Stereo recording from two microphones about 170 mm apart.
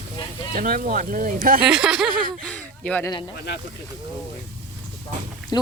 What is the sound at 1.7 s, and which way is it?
Speech, 5° right (ahead or behind).